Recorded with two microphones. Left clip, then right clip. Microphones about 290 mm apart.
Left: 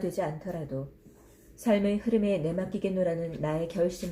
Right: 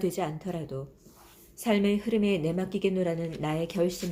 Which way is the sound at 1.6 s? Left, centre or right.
Right.